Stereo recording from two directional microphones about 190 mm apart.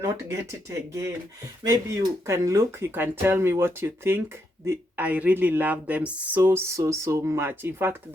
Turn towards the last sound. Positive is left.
turn(degrees=-10)  # may be behind; listen again after turning